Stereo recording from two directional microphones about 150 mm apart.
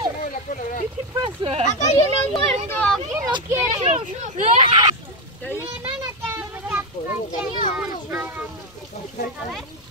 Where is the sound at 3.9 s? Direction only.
50° right (ahead or behind).